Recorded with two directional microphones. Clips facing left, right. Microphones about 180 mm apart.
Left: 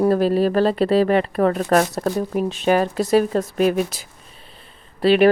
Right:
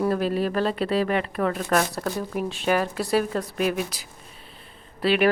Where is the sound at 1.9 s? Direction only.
25° left (ahead or behind).